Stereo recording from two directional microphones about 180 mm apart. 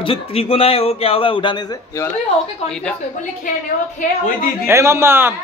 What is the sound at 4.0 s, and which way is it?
Speech, 50° left (ahead or behind).